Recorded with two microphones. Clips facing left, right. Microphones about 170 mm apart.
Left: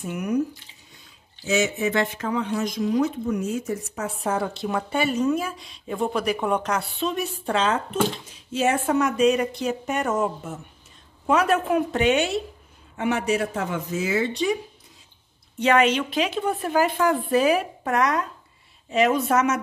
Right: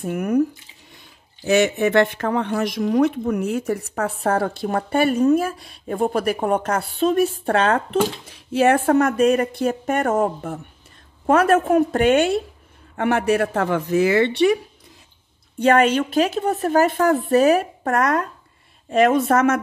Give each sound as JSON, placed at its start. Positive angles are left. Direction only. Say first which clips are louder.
{"t": 0.0, "sound": "speech", "louder": "right 4 dB", "side_deg": -55}
{"t": 1.4, "sound": "speech", "louder": "right 6 dB", "side_deg": -60}
{"t": 15.6, "sound": "speech", "louder": "right 3 dB", "side_deg": -50}